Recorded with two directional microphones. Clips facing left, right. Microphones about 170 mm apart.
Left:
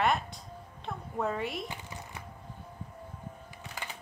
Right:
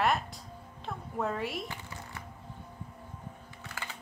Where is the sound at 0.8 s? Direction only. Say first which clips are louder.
Left 1 dB; centre (ahead or behind).